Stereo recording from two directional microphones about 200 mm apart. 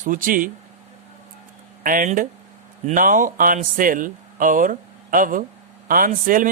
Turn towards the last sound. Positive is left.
turn(degrees=-45)  # may be behind; listen again after turning